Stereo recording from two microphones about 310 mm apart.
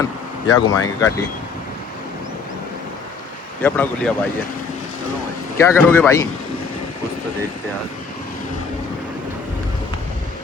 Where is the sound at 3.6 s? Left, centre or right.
Centre.